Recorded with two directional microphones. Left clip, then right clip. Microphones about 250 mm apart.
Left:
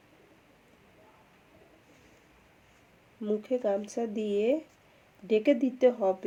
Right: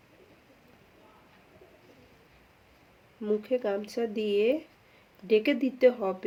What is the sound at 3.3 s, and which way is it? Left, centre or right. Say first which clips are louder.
Speech: right 1 dB; centre.